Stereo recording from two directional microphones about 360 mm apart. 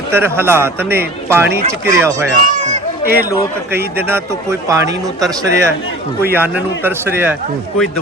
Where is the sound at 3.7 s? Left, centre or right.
Centre.